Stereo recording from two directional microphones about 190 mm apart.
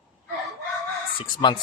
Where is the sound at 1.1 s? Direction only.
20° left (ahead or behind).